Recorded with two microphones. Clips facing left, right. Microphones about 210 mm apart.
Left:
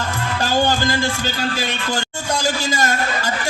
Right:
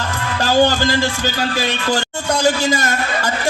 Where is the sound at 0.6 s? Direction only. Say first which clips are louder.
Right 5 dB; 50° left (ahead or behind).